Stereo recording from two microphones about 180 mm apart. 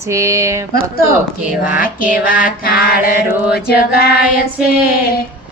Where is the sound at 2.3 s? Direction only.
55° left (ahead or behind).